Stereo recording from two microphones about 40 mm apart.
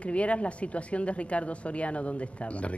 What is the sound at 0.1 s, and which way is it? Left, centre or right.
Speech, left.